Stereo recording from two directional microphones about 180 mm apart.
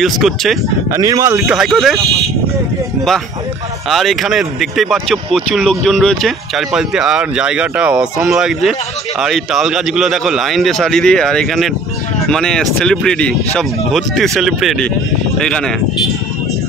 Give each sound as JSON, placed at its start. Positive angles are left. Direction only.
{"t": 0.0, "sound": "speech", "side_deg": 0}
{"t": 0.9, "sound": "speech", "side_deg": -20}
{"t": 1.4, "sound": "speech", "side_deg": 0}
{"t": 3.9, "sound": "speech", "side_deg": 0}